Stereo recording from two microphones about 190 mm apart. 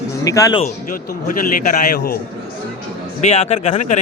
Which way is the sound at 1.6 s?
50° left (ahead or behind).